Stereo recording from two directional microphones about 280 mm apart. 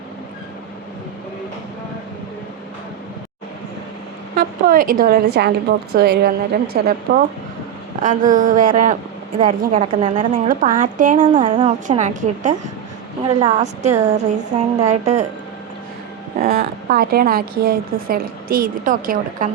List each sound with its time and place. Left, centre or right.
4.4 s a woman's voice: right
16.4 s a woman's voice: right